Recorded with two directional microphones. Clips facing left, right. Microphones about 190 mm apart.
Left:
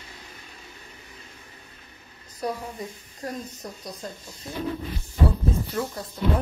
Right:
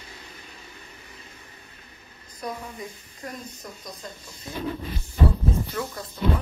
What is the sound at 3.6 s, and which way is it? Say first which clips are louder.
Speech: left 3 dB; 35° left (ahead or behind).